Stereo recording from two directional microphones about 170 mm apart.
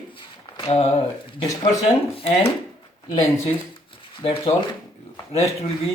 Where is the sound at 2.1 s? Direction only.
35° left (ahead or behind).